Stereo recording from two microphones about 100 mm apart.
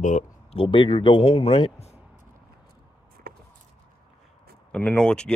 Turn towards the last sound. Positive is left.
turn(degrees=10)  # may be behind; listen again after turning